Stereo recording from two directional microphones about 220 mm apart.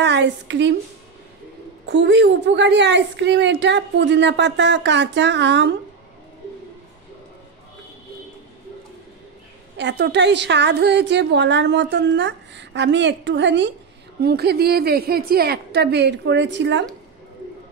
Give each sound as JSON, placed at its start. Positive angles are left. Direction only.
{"t": 0.0, "sound": "speech", "side_deg": -50}
{"t": 1.9, "sound": "a woman's voice", "side_deg": -50}
{"t": 9.8, "sound": "a woman's voice", "side_deg": -50}